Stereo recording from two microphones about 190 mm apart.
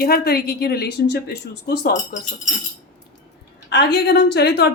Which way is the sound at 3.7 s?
60° left (ahead or behind).